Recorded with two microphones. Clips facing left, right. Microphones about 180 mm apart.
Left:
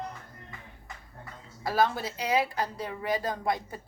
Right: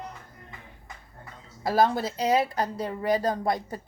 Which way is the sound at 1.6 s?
40° right (ahead or behind).